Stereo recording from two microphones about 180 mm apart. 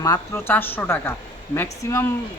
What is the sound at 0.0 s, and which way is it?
Speech, 15° left (ahead or behind).